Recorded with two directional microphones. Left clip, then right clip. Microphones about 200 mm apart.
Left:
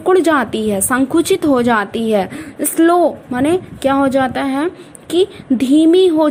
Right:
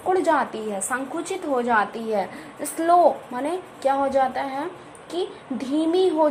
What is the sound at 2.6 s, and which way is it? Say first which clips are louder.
Speech: left 5 dB; 25° left (ahead or behind).